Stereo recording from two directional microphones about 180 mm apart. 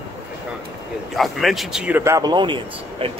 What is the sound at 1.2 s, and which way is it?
Speech, centre (ahead or behind).